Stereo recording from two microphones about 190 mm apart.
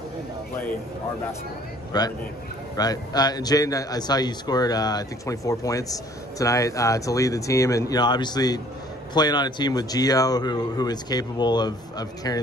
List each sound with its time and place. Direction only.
1.9 s speech: 20° left (ahead or behind)